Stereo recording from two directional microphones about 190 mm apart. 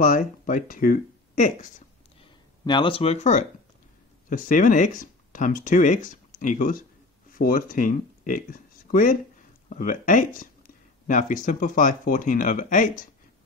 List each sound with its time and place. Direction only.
0.0 s speech: 45° left (ahead or behind)
2.6 s speech: 25° left (ahead or behind); by 13.0 s 45° left (ahead or behind)